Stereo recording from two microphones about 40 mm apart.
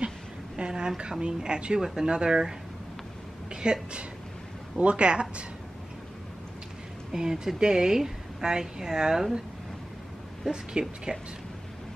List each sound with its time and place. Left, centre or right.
0.6 s speech: right
3.6 s speech: right
7.1 s speech: centre
10.5 s speech: right